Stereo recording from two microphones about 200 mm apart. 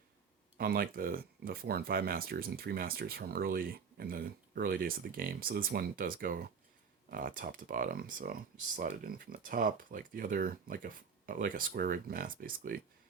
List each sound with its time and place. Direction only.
0.5 s speech: 50° right (ahead or behind)